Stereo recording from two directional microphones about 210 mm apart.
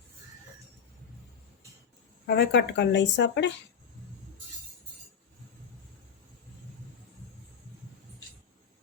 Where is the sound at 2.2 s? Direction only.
50° left (ahead or behind).